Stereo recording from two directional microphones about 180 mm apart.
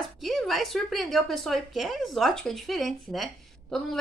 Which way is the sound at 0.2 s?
Centre (ahead or behind).